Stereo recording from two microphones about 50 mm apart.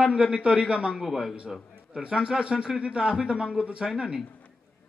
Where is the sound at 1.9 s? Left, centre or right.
Right.